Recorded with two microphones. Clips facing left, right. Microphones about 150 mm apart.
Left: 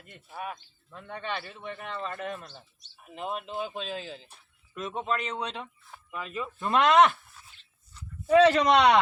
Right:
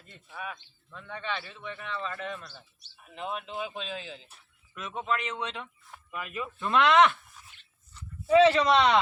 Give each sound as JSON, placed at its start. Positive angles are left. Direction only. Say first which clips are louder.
{"t": 0.1, "sound": "a man's voice", "louder": "left 2 dB", "side_deg": 45}
{"t": 8.4, "sound": "a man's voice", "louder": "left 2 dB", "side_deg": 45}